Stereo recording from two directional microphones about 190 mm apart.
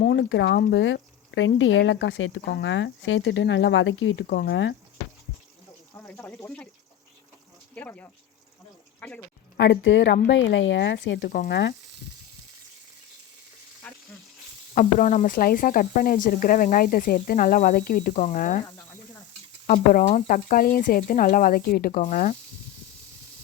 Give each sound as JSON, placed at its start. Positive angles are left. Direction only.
{"t": 0.0, "sound": "speech", "side_deg": 65}
{"t": 5.9, "sound": "speech", "side_deg": 10}
{"t": 7.8, "sound": "speech", "side_deg": 10}
{"t": 9.6, "sound": "speech", "side_deg": 75}
{"t": 11.3, "sound": "speech", "side_deg": 55}
{"t": 13.8, "sound": "frying", "side_deg": 5}
{"t": 14.8, "sound": "speech", "side_deg": 45}
{"t": 19.6, "sound": "speech", "side_deg": 45}